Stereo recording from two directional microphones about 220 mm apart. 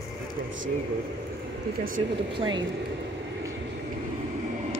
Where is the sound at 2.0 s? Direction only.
25° right (ahead or behind).